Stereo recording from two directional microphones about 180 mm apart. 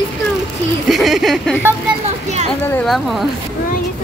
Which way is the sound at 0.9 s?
Centre (ahead or behind).